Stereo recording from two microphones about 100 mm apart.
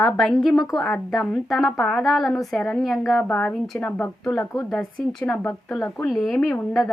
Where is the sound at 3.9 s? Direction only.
20° left (ahead or behind).